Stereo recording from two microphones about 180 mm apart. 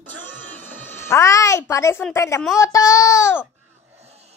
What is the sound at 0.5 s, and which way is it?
Speech, 15° left (ahead or behind).